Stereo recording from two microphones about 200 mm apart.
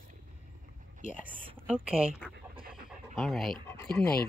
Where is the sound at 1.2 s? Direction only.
5° right (ahead or behind).